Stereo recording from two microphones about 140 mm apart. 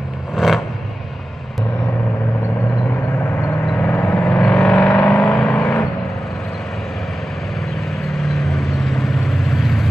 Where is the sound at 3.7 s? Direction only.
10° left (ahead or behind).